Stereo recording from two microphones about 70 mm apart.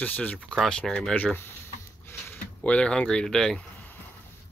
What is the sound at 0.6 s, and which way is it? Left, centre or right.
Speech, centre.